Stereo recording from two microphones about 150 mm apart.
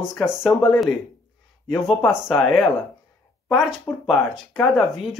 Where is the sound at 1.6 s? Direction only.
Centre (ahead or behind).